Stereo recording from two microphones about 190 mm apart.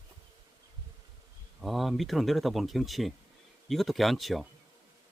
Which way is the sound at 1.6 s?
Centre (ahead or behind).